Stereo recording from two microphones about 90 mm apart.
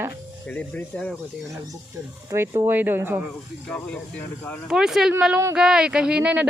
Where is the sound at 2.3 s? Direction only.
30° right (ahead or behind).